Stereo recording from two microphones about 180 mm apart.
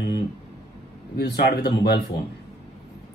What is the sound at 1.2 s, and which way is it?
Speech, 65° left (ahead or behind).